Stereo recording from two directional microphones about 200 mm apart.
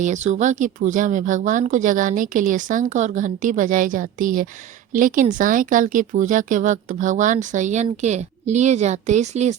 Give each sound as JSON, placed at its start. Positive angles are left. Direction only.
{"t": 0.0, "sound": "speech", "side_deg": -35}